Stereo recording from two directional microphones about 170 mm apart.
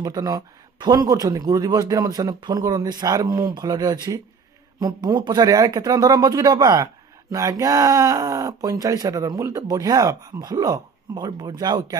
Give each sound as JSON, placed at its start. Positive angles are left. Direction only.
{"t": 0.0, "sound": "speech", "side_deg": -20}